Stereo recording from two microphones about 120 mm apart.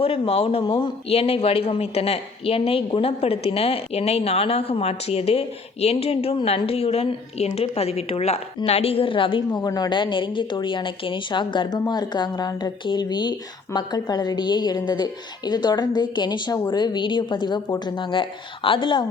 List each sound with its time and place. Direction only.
0.0 s a woman's voice: 55° left (ahead or behind)